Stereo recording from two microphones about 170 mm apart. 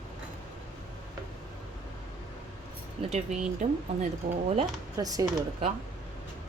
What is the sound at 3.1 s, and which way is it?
A woman's voice, 45° right (ahead or behind).